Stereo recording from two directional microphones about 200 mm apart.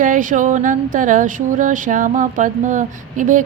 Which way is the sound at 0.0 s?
40° right (ahead or behind).